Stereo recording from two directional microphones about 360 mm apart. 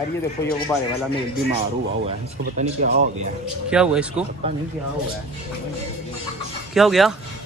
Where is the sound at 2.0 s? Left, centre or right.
Right.